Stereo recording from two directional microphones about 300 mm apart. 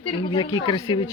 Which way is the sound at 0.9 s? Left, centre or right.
Centre.